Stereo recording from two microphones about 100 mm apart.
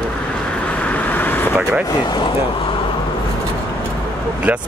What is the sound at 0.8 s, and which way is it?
Vehicle, 15° left (ahead or behind).